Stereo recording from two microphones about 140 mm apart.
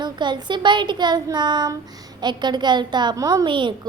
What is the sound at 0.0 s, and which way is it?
Speech, 30° right (ahead or behind).